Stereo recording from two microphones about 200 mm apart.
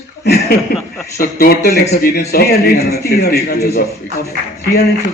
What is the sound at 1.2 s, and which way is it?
A man's voice, 50° left (ahead or behind).